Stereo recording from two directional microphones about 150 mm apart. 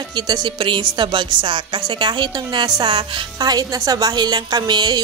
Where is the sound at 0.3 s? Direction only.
30° right (ahead or behind).